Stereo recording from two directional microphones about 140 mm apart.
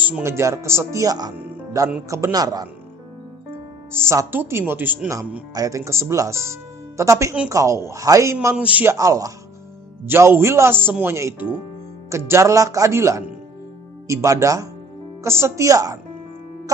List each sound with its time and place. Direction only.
0.2 s speech: 20° right (ahead or behind)
3.9 s speech: 20° right (ahead or behind)
8.5 s speech: 10° right (ahead or behind)